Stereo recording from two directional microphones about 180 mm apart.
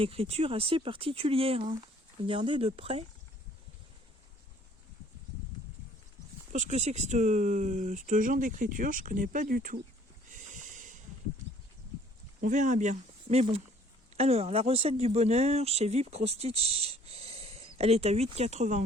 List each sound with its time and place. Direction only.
0.0 s speech: 30° right (ahead or behind)
6.5 s speech: 40° right (ahead or behind)
10.3 s a sound: 45° right (ahead or behind)
12.4 s speech: 40° right (ahead or behind)